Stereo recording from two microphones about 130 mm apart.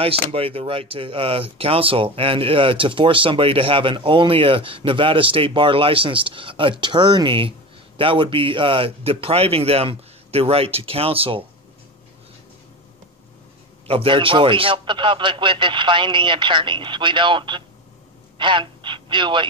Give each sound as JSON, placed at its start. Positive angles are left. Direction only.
{"t": 0.3, "sound": "speech", "side_deg": -45}
{"t": 13.8, "sound": "a man's voice", "side_deg": -40}